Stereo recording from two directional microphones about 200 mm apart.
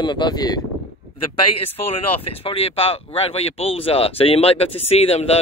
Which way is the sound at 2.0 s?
30° left (ahead or behind).